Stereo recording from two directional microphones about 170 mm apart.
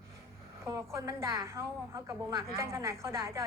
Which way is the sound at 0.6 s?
20° right (ahead or behind).